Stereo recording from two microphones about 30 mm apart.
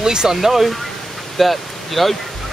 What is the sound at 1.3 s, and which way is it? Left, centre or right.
Speech, centre.